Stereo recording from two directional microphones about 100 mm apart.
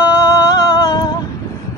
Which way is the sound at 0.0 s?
40° left (ahead or behind).